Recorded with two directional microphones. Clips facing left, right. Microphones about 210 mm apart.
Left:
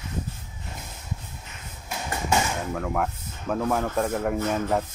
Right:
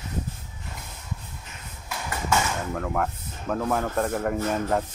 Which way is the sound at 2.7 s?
Centre (ahead or behind).